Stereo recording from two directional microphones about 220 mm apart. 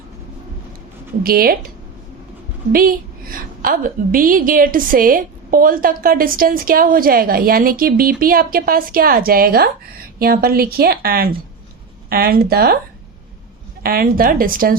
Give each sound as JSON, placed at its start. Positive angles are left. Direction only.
{"t": 1.2, "sound": "a woman's voice", "side_deg": -40}
{"t": 2.7, "sound": "a woman's voice", "side_deg": -40}
{"t": 13.8, "sound": "a woman's voice", "side_deg": -40}